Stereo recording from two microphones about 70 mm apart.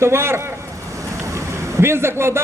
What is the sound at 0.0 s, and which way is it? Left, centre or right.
Speech, right.